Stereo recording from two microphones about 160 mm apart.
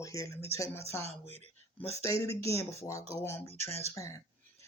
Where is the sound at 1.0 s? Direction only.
40° right (ahead or behind).